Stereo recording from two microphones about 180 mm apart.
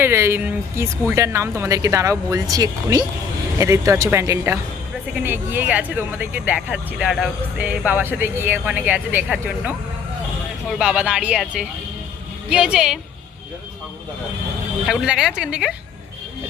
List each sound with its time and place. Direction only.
0.0 s speech: 15° right (ahead or behind)
14.8 s speech: 5° right (ahead or behind)